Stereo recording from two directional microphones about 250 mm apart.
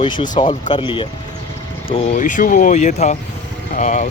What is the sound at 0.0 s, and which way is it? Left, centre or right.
Speech, centre.